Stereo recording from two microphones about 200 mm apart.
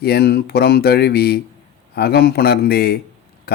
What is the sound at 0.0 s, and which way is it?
Speech, 55° left (ahead or behind).